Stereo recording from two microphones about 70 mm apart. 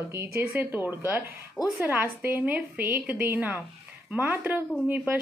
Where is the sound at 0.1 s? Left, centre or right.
Right.